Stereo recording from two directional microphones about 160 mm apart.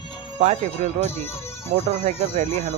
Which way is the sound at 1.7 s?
45° right (ahead or behind).